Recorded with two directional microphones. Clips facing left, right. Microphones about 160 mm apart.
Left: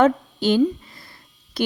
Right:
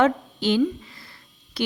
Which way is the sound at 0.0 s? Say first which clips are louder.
Left 3 dB; 45° left (ahead or behind).